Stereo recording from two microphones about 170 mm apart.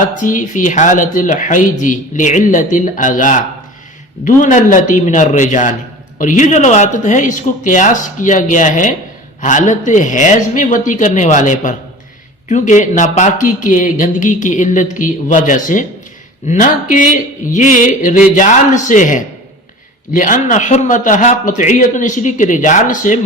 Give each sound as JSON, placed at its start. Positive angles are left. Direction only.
{"t": 0.2, "sound": "speech", "side_deg": 50}